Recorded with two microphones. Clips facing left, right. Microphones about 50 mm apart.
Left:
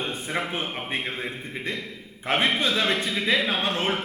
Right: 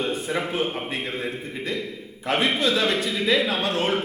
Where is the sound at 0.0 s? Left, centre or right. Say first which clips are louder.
Right 3 dB; left.